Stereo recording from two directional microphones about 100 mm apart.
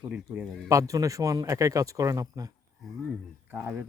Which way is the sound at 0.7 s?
35° right (ahead or behind).